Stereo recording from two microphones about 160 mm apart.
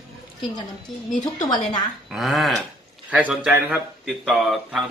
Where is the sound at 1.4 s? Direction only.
25° left (ahead or behind).